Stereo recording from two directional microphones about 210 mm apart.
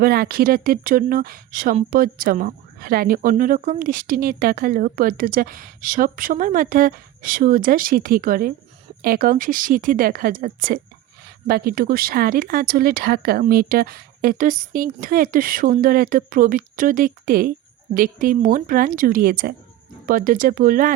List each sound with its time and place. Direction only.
0.0 s speech: 45° right (ahead or behind)